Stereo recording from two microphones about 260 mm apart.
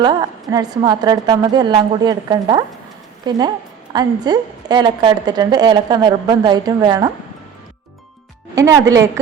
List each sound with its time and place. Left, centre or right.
0.0 s a woman's voice: centre
8.5 s a woman's voice: centre